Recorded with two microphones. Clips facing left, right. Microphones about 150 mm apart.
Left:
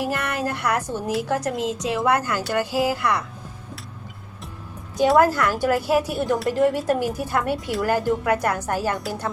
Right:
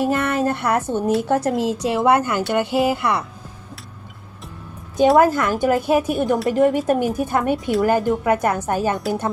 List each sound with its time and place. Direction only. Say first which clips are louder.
0.0 s speech: right 6 dB; 25° right (ahead or behind)
5.1 s speech: right 2 dB; 20° right (ahead or behind)